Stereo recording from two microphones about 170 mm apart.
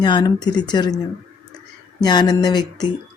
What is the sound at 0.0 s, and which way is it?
Speech, 25° left (ahead or behind).